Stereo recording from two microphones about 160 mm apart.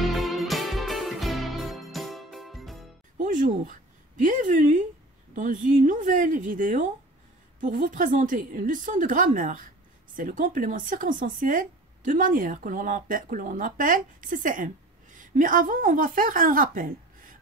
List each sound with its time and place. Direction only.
0.0 s music: centre (ahead or behind)
3.2 s music: 55° right (ahead or behind)
4.2 s speech: 55° right (ahead or behind)